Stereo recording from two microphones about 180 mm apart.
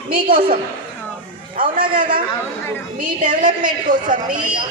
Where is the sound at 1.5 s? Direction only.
50° right (ahead or behind).